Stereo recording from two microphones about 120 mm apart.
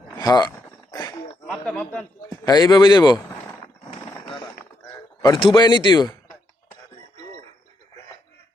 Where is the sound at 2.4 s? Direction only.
35° left (ahead or behind).